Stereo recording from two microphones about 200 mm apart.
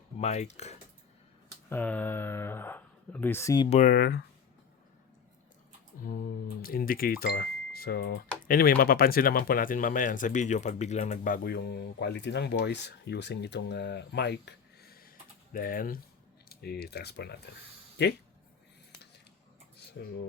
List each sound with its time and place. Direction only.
0.2 s speech: 35° left (ahead or behind)
1.7 s speech: 10° left (ahead or behind)
3.7 s speech: 40° left (ahead or behind)
6.0 s speech: 45° left (ahead or behind)
20.0 s speech: 60° left (ahead or behind)